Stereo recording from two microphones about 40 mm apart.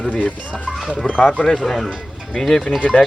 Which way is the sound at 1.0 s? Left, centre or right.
Left.